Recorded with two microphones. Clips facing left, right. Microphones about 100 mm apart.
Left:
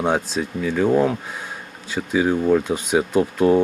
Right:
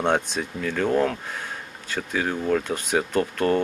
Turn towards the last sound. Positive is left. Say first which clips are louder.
# left 5 dB
turn(degrees=10)  # may be behind; listen again after turning